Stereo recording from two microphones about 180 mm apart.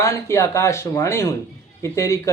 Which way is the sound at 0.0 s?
15° left (ahead or behind).